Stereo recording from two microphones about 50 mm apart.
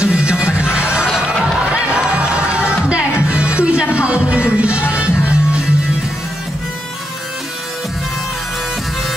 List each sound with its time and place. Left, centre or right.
0.0 s music: right